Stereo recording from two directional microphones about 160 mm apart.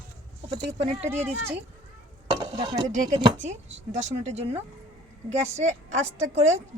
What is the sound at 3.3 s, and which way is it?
Speech, 45° right (ahead or behind).